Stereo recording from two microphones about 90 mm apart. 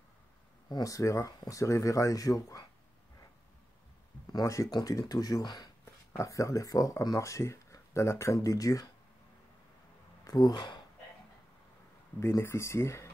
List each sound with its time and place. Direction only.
0.7 s speech: 45° left (ahead or behind)
4.3 s speech: 40° left (ahead or behind)
6.1 s speech: 35° left (ahead or behind)
10.2 s speech: 45° left (ahead or behind)
12.2 s speech: 30° left (ahead or behind)